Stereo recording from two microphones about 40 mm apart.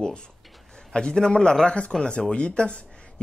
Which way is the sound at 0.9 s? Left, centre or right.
Centre.